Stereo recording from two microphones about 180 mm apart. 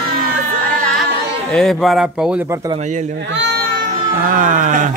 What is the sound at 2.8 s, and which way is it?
Speech, 40° right (ahead or behind).